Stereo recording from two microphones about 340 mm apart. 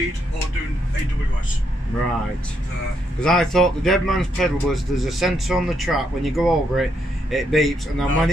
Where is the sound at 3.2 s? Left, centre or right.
Centre.